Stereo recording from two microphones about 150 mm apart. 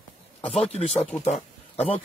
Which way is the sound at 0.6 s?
45° left (ahead or behind).